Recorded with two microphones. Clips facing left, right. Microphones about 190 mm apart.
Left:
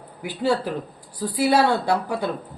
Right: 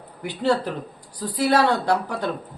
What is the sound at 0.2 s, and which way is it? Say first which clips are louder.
Speech: right 1 dB; 5° left (ahead or behind).